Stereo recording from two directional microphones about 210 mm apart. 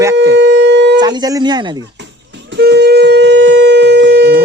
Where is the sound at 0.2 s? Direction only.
60° right (ahead or behind).